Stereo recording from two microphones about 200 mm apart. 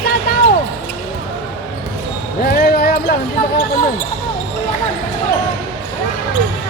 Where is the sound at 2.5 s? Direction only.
50° left (ahead or behind).